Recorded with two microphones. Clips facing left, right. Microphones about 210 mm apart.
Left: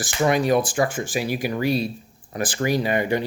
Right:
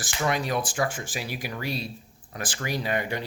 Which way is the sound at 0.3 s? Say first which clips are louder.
Left 8 dB; 5° left (ahead or behind).